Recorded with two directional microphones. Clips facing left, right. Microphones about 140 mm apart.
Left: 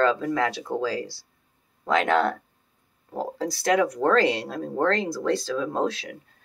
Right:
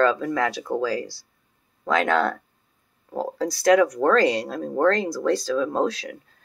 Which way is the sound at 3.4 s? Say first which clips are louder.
Right 5 dB; 25° left (ahead or behind).